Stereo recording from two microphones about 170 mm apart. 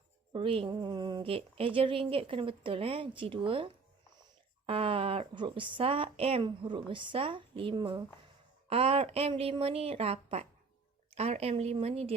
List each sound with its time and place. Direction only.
0.3 s speech: 30° right (ahead or behind)